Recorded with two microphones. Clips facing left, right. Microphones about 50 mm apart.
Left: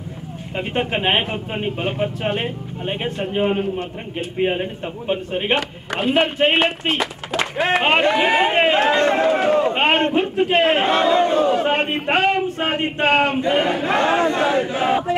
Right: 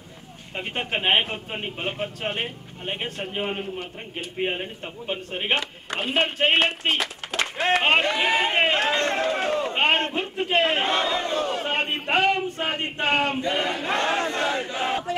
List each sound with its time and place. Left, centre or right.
0.6 s a man's voice: centre
12.1 s speech: left
14.8 s battle cry: centre